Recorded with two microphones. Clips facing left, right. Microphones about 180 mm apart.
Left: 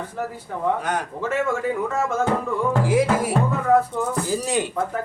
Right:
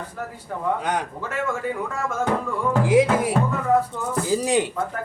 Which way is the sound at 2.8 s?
20° right (ahead or behind).